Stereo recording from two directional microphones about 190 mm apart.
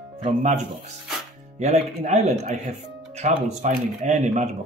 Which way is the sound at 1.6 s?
35° right (ahead or behind).